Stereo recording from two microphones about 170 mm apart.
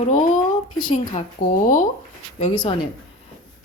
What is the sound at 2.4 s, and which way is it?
Speech, 30° left (ahead or behind).